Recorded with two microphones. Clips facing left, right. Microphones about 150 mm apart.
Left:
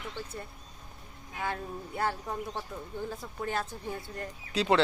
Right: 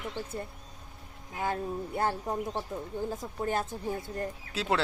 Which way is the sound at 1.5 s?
30° right (ahead or behind).